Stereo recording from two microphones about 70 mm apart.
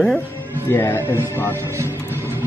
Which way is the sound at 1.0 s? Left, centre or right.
Right.